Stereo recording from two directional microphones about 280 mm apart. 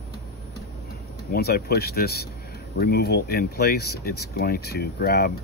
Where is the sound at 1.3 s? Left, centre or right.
Left.